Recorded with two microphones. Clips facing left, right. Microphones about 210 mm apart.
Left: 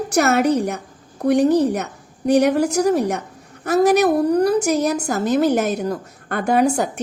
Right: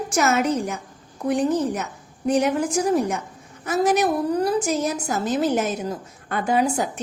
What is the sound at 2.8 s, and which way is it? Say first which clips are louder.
Speech: left 3 dB; 40° left (ahead or behind).